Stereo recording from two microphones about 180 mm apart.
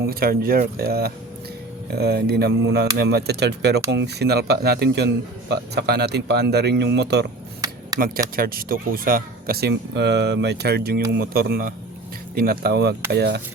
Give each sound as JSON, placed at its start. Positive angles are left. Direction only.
{"t": 0.1, "sound": "a man's voice", "side_deg": -55}
{"t": 7.6, "sound": "a sound", "side_deg": -20}
{"t": 7.9, "sound": "speech", "side_deg": -55}